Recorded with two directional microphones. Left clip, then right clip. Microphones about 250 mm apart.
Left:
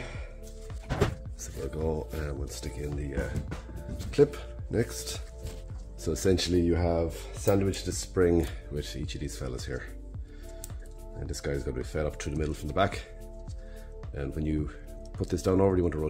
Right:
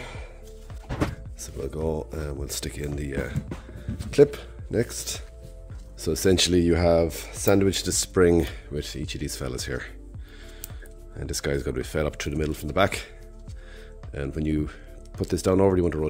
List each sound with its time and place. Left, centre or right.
1.4 s speech: right
4.1 s speech: right
4.4 s speech: centre
11.1 s speech: right
14.1 s speech: right